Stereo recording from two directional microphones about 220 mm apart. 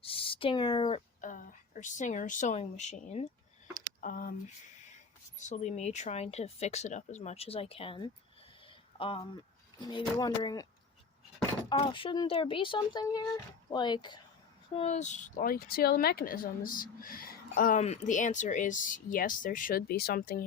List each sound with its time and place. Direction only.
0.0 s a woman's voice: 25° left (ahead or behind)
5.4 s speech: 30° left (ahead or behind); by 10.7 s 15° left (ahead or behind)
11.7 s speech: 25° left (ahead or behind)
14.8 s a woman's voice: 30° left (ahead or behind)